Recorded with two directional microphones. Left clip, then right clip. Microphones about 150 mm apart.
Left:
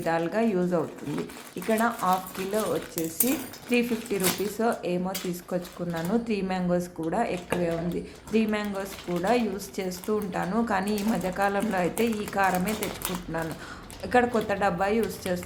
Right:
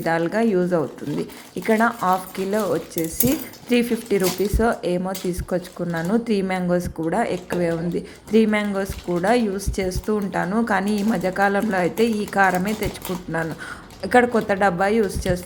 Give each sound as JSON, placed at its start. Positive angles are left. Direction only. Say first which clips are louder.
{"t": 0.0, "sound": "speech", "louder": "right 5 dB", "side_deg": -30}
{"t": 14.0, "sound": "speech", "louder": "right 6 dB", "side_deg": -35}